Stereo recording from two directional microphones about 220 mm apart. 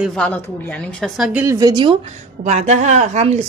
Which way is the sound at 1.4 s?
15° right (ahead or behind).